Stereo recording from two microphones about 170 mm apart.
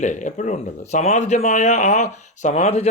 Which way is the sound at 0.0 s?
45° left (ahead or behind).